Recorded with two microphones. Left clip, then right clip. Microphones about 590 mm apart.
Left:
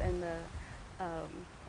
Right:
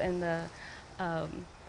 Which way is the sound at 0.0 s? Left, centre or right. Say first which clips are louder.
Right 5 dB; right.